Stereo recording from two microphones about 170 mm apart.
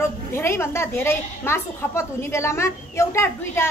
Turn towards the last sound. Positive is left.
turn(degrees=15)  # may be behind; listen again after turning